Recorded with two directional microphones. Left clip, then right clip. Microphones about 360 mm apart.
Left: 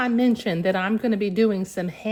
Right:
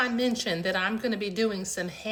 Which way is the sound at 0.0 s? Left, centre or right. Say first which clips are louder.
Left 4 dB; centre.